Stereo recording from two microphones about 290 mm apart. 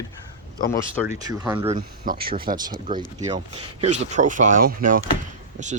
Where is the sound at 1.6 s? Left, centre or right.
Right.